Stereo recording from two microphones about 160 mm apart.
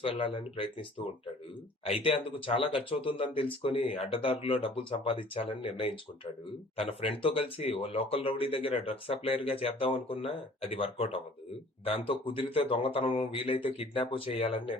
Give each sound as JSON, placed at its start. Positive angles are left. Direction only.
{"t": 0.0, "sound": "speech", "side_deg": 35}